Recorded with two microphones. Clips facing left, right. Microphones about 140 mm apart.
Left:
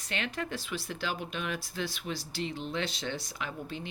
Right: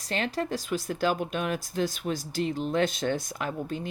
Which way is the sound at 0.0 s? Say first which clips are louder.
Right 6 dB; 35° right (ahead or behind).